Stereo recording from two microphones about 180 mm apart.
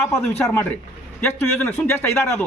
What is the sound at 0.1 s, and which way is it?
Speech, 15° left (ahead or behind).